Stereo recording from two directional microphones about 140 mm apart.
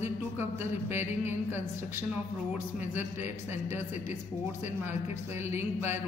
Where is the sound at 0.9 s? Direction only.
15° right (ahead or behind).